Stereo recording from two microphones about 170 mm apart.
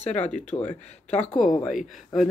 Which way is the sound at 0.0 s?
40° left (ahead or behind).